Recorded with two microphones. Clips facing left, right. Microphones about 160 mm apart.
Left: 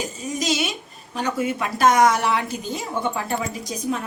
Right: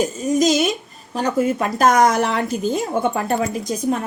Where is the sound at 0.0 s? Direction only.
45° right (ahead or behind).